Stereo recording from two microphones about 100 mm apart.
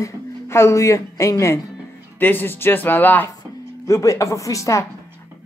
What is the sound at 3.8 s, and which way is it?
Speech, 30° left (ahead or behind).